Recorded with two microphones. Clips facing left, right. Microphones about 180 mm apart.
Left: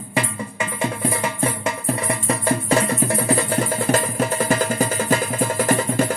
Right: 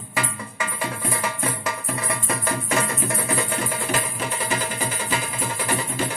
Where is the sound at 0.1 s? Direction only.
25° left (ahead or behind).